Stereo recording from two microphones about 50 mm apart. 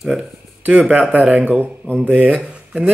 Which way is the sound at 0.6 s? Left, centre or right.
Right.